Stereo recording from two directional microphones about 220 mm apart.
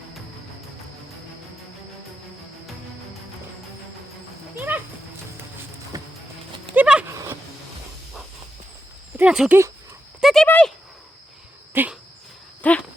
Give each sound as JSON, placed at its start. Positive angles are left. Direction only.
{"t": 4.7, "sound": "music", "side_deg": -10}
{"t": 5.9, "sound": "music", "side_deg": -15}
{"t": 6.7, "sound": "a sound", "side_deg": -5}
{"t": 9.1, "sound": "speech", "side_deg": -5}
{"t": 10.2, "sound": "horse", "side_deg": 0}
{"t": 11.7, "sound": "dog", "side_deg": -10}
{"t": 12.6, "sound": "a sound", "side_deg": 5}